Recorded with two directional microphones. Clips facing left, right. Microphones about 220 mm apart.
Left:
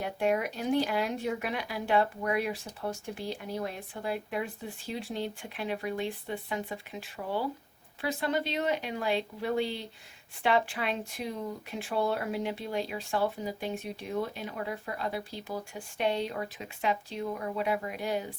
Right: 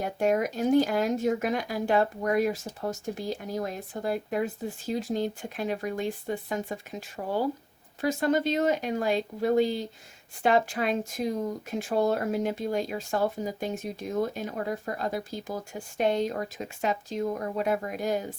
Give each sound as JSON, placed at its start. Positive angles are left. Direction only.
{"t": 0.0, "sound": "speech", "side_deg": -45}